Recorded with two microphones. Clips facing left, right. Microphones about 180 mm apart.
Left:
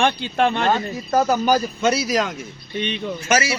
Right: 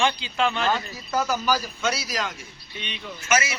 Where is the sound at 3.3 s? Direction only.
30° left (ahead or behind).